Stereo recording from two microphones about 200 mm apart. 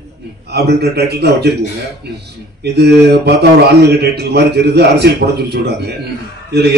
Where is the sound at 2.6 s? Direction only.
55° right (ahead or behind).